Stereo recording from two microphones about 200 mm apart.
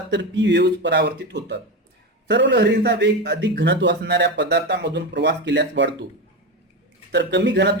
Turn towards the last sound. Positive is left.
turn(degrees=-60)  # may be behind; listen again after turning